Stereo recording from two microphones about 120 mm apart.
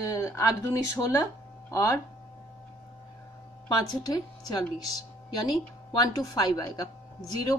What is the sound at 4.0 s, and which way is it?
Speech, 35° left (ahead or behind).